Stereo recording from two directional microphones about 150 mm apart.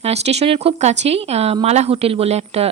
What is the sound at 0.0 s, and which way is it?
Speech, 45° right (ahead or behind).